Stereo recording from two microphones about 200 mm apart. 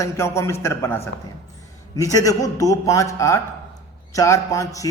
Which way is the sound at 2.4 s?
15° left (ahead or behind).